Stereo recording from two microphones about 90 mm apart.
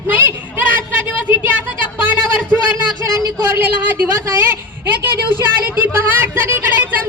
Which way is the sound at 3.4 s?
25° right (ahead or behind).